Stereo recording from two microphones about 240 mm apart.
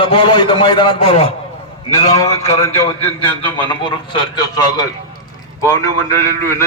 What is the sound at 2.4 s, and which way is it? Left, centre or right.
A man's voice, centre.